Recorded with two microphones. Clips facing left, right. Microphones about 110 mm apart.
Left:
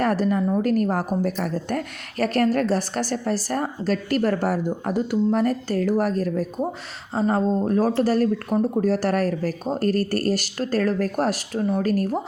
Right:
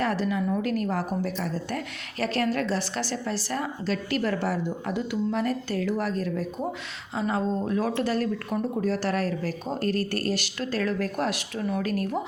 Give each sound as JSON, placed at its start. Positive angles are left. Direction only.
{"t": 0.0, "sound": "a woman's voice", "side_deg": 45}